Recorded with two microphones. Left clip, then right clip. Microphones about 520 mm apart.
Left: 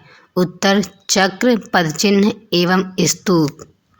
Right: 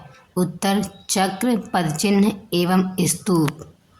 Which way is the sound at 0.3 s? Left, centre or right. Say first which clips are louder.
Left 7 dB; right.